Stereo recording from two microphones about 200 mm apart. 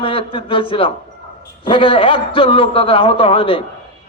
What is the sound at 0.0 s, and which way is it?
A man's voice, 25° left (ahead or behind).